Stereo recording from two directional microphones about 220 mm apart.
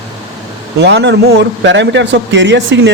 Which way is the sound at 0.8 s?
50° right (ahead or behind).